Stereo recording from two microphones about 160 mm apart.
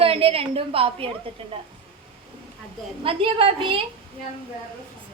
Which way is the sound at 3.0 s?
35° right (ahead or behind).